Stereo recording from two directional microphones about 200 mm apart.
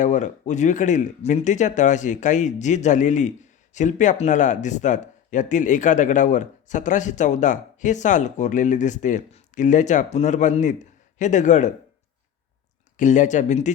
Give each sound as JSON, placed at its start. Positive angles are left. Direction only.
{"t": 0.0, "sound": "speech", "side_deg": 35}
{"t": 13.0, "sound": "speech", "side_deg": 40}